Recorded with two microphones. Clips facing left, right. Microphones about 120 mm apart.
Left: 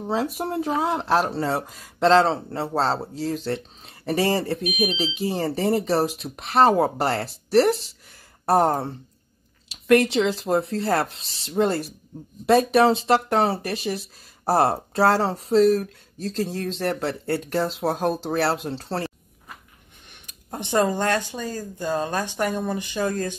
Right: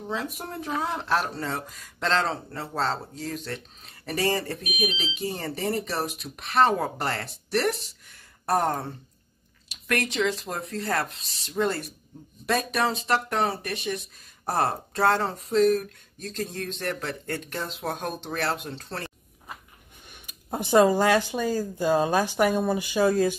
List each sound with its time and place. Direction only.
0.0 s speech: 35° left (ahead or behind)
20.2 s speech: 10° right (ahead or behind)